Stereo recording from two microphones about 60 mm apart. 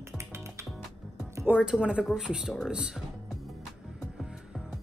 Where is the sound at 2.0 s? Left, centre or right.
Centre.